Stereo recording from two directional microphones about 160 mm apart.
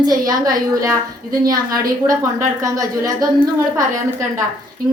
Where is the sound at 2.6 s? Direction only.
20° right (ahead or behind).